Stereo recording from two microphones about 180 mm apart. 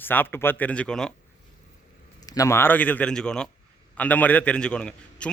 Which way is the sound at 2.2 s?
20° left (ahead or behind).